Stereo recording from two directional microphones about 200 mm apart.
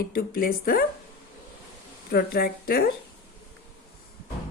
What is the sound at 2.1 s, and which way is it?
Speech, 50° left (ahead or behind).